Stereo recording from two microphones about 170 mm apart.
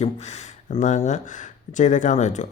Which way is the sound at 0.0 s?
40° left (ahead or behind).